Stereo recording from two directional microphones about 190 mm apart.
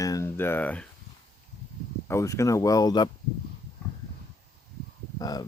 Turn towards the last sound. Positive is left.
turn(degrees=20)  # may be behind; listen again after turning